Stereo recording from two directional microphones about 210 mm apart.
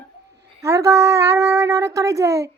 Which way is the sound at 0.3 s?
15° right (ahead or behind).